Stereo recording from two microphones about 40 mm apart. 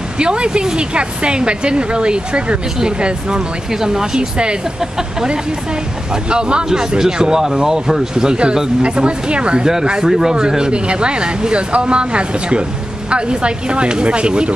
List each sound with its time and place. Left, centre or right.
0.2 s speech: right
10.0 s speech: centre; by 14.5 s right